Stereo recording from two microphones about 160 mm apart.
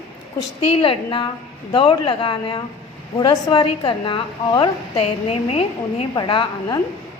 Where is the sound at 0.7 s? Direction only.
35° left (ahead or behind).